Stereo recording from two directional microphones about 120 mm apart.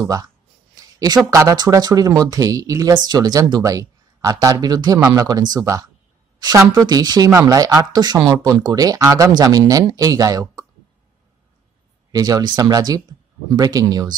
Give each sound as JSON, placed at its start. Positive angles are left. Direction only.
{"t": 0.0, "sound": "speech", "side_deg": -30}
{"t": 0.7, "sound": "a sound", "side_deg": -30}
{"t": 1.2, "sound": "speech", "side_deg": -25}
{"t": 12.1, "sound": "speech", "side_deg": -35}